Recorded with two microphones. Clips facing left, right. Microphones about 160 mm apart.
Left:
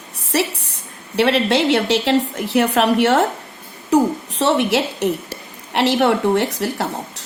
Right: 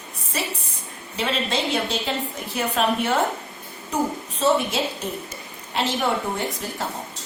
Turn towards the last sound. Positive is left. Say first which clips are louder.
# left 6 dB
turn(degrees=75)  # may be behind; listen again after turning